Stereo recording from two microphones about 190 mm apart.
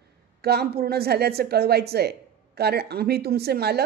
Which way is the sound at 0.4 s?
55° right (ahead or behind).